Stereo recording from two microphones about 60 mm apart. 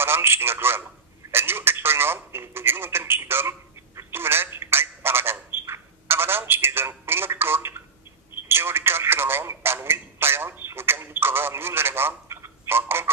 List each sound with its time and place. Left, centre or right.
0.0 s speech: right